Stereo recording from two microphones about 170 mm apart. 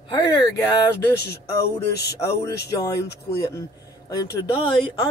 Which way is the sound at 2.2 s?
20° left (ahead or behind).